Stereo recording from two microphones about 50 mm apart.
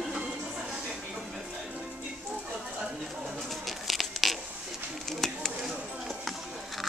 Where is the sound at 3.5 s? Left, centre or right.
Centre.